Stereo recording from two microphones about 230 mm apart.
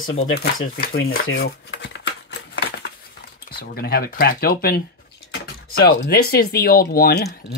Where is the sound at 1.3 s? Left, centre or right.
Left.